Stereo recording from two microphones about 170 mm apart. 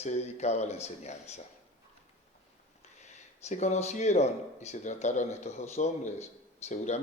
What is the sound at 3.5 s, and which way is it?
A man's voice, 45° left (ahead or behind).